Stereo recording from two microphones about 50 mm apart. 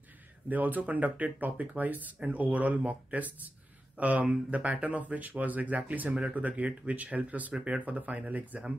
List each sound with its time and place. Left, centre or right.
0.5 s speech: right